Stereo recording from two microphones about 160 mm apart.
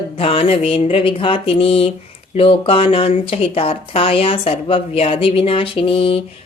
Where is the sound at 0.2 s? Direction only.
35° left (ahead or behind).